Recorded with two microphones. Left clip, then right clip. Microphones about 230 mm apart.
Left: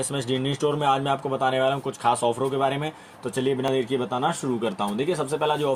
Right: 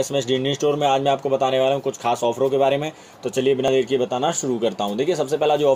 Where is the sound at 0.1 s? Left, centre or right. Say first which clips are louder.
Right 6 dB; left.